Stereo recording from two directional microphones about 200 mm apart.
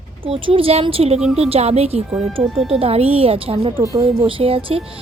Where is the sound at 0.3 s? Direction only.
25° right (ahead or behind).